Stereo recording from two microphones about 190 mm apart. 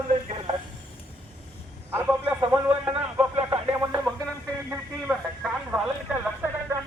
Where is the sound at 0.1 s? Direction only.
35° right (ahead or behind).